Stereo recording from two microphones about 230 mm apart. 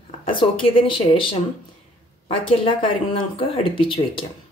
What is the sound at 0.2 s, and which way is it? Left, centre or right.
Speech, left.